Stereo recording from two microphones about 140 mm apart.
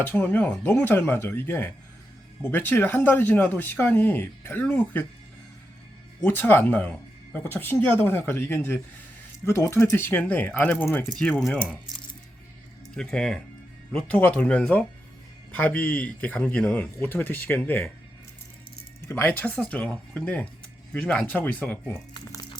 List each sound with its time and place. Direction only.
0.0 s speech: 10° left (ahead or behind)
6.2 s speech: 15° left (ahead or behind)
12.9 s speech: 5° left (ahead or behind)
19.0 s speech: 15° left (ahead or behind)
22.1 s music: 30° left (ahead or behind)